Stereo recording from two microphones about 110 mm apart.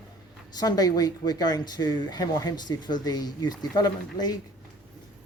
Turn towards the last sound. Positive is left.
turn(degrees=35)  # may be behind; listen again after turning